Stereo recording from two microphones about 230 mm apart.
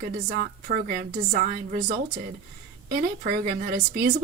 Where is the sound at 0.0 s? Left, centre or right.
Right.